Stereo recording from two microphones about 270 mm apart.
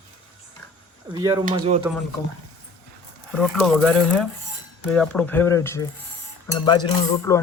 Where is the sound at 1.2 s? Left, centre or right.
Centre.